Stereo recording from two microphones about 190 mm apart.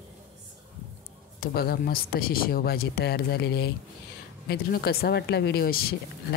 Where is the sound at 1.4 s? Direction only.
55° left (ahead or behind).